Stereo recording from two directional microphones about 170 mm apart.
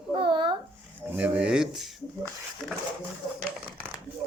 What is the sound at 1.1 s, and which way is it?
Speech, 10° right (ahead or behind).